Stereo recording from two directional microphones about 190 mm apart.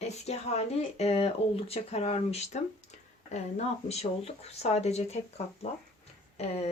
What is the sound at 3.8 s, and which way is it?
Speech, 35° left (ahead or behind).